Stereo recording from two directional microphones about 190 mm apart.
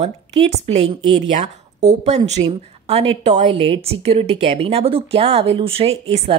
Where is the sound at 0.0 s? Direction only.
35° right (ahead or behind).